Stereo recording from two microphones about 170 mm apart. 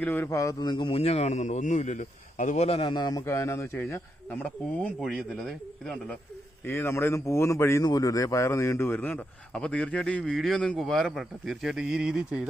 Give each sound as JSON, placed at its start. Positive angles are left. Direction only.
{"t": 0.0, "sound": "a man's voice", "side_deg": 10}
{"t": 6.6, "sound": "speech", "side_deg": 15}